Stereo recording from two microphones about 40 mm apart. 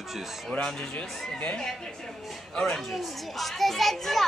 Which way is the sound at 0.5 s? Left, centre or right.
Left.